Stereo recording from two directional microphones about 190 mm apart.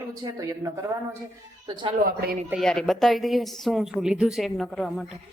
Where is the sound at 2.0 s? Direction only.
50° right (ahead or behind).